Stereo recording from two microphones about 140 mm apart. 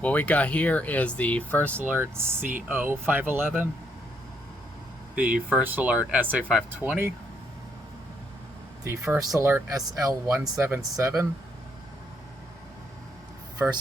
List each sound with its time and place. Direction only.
0.0 s speech: 10° left (ahead or behind)
2.0 s speech: 15° right (ahead or behind)
5.1 s speech: 10° right (ahead or behind)
8.8 s speech: 20° right (ahead or behind)
13.6 s speech: 20° right (ahead or behind)